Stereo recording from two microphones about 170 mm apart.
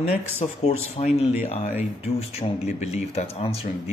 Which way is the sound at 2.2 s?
40° left (ahead or behind).